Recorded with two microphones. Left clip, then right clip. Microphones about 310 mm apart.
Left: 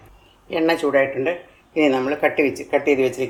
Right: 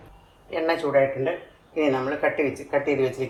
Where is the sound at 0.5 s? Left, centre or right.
Left.